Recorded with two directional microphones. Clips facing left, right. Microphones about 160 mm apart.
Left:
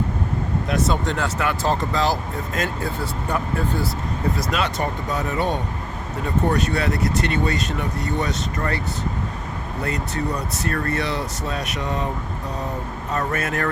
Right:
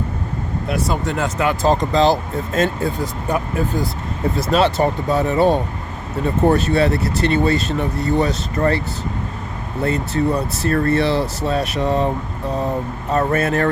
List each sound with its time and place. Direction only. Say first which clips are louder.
1.1 s speech: right 4 dB; 20° right (ahead or behind)
3.0 s speech: right 3 dB; 15° right (ahead or behind)
4.4 s speech: right 7 dB; 30° right (ahead or behind)
9.8 s speech: right 7 dB; 30° right (ahead or behind)
13.1 s speech: right 7 dB; 30° right (ahead or behind)